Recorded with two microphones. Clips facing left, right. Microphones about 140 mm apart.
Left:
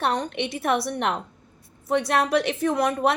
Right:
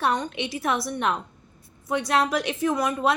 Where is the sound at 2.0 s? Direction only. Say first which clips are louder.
Even; 55° left (ahead or behind).